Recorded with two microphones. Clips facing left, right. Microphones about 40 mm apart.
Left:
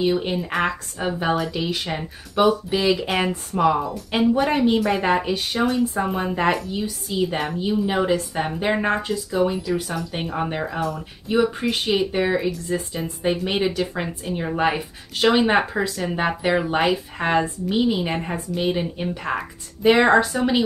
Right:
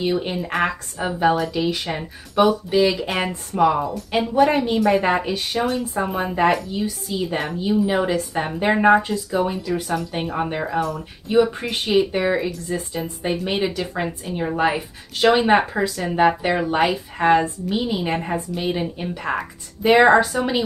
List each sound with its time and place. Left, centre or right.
0.0 s speech: centre
20.3 s speech: centre